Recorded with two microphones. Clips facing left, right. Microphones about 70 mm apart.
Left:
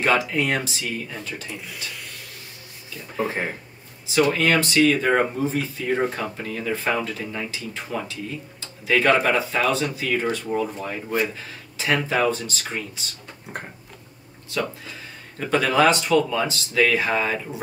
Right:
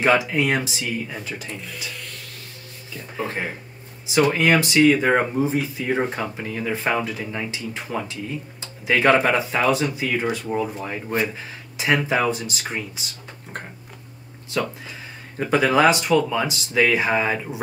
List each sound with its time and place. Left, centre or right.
0.0 s speech: centre
3.2 s speech: centre
4.1 s speech: centre
11.8 s speech: centre
15.3 s speech: centre